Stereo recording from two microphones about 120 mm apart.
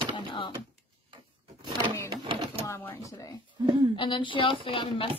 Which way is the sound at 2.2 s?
45° right (ahead or behind).